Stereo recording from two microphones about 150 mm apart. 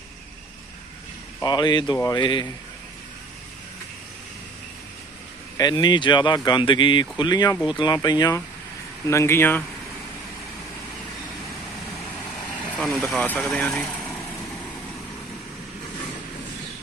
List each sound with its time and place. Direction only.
1.4 s speech: 25° left (ahead or behind)
5.5 s speech: 25° left (ahead or behind)
12.7 s speech: centre (ahead or behind)